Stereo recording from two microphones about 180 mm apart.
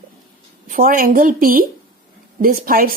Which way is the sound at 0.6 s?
50° right (ahead or behind).